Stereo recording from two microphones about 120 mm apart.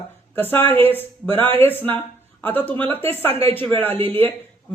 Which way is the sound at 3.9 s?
50° right (ahead or behind).